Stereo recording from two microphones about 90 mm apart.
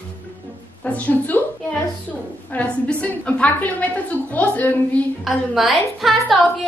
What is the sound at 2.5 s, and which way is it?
A woman's voice, 15° left (ahead or behind).